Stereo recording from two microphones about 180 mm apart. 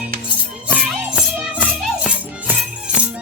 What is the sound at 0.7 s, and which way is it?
Music, 5° right (ahead or behind).